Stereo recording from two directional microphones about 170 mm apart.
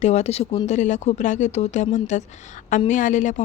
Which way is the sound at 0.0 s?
40° left (ahead or behind).